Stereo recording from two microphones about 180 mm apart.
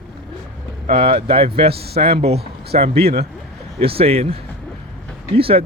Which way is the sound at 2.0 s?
35° right (ahead or behind).